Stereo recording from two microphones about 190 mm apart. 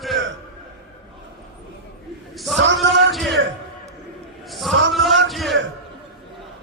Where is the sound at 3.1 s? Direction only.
Centre (ahead or behind).